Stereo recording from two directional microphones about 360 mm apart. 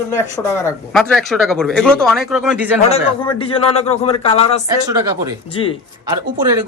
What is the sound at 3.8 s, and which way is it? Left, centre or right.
Speech, centre.